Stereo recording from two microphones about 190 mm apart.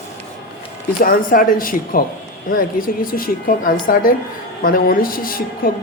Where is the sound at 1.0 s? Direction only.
50° left (ahead or behind).